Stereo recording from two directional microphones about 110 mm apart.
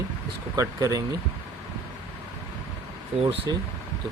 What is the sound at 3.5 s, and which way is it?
Speech, 40° right (ahead or behind).